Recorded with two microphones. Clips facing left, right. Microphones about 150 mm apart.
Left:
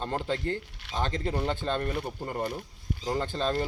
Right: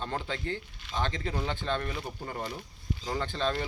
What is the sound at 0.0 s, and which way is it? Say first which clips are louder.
Speech: left 4 dB; 40° left (ahead or behind).